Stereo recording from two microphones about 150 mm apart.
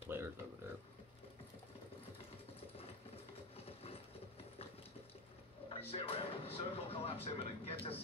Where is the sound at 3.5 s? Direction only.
40° left (ahead or behind).